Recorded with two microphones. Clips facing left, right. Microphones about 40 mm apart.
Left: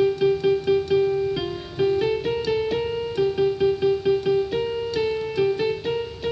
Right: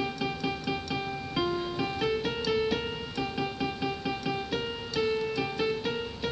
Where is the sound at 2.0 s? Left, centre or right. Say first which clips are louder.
Left 6 dB; left.